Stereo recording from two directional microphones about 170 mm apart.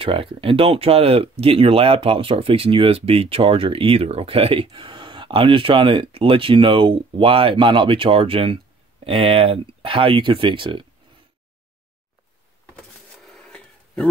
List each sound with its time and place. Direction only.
0.0 s speech: 30° right (ahead or behind)
13.3 s wheeze: 5° left (ahead or behind)